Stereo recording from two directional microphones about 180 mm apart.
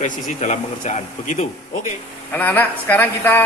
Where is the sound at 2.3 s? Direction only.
10° left (ahead or behind).